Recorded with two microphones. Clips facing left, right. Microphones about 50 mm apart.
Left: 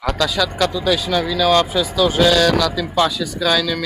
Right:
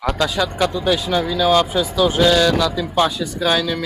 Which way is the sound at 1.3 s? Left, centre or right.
Left.